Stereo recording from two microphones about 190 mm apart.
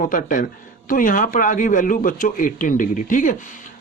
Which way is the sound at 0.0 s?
45° left (ahead or behind).